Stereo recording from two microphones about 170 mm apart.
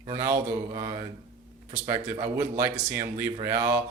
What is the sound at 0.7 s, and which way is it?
A man's voice, 25° right (ahead or behind).